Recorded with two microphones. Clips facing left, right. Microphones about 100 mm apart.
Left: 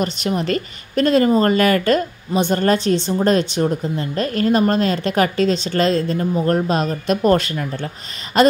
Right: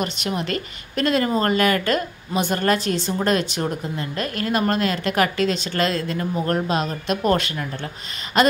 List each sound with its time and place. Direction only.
0.0 s speech: 35° left (ahead or behind)
6.7 s speech: 40° left (ahead or behind)